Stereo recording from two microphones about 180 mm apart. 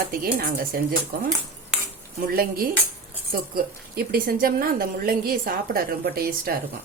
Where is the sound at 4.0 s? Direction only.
55° right (ahead or behind).